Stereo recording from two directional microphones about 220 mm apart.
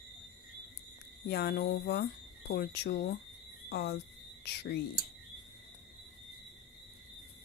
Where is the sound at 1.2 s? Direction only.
45° left (ahead or behind).